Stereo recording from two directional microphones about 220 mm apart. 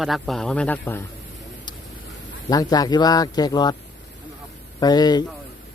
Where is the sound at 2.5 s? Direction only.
15° left (ahead or behind).